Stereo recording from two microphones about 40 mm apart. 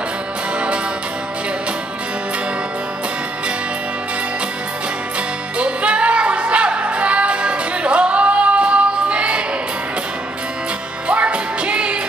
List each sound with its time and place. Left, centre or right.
5.6 s music: right
11.1 s music: right